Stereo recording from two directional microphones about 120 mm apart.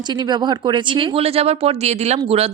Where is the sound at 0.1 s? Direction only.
35° right (ahead or behind).